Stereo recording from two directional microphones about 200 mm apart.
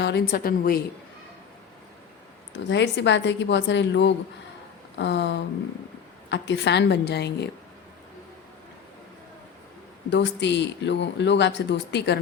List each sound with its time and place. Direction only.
0.0 s a woman's voice: 55° left (ahead or behind)
2.6 s speech: 60° left (ahead or behind)
10.1 s speech: 60° left (ahead or behind)